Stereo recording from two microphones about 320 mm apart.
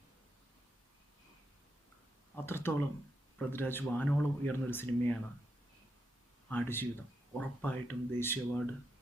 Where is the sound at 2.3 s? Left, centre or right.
Centre.